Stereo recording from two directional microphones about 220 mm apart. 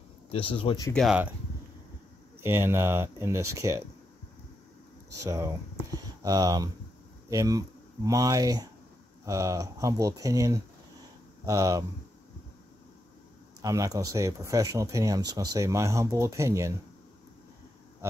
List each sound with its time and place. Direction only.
0.3 s speech: 25° left (ahead or behind)
0.9 s speech: 5° right (ahead or behind)
2.4 s speech: 10° right (ahead or behind)
5.2 s speech: 15° right (ahead or behind)
13.6 s speech: 15° right (ahead or behind)